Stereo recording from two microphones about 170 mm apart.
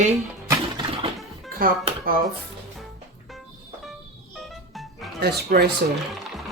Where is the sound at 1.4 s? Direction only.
60° right (ahead or behind).